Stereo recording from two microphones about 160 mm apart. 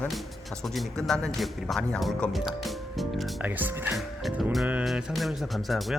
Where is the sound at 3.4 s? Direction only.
10° right (ahead or behind).